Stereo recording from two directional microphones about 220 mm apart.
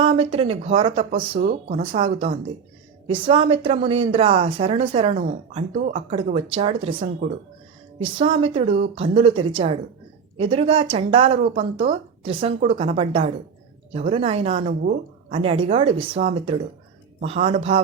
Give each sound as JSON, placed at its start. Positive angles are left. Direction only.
{"t": 0.0, "sound": "speech", "side_deg": -25}
{"t": 1.4, "sound": "speech", "side_deg": -35}